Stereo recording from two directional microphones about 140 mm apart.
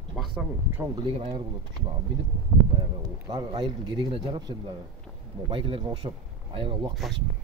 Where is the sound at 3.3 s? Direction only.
35° right (ahead or behind).